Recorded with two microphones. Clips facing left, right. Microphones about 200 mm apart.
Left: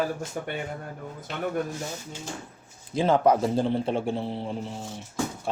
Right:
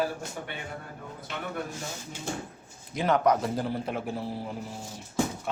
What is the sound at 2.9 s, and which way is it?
A man's voice, 30° left (ahead or behind).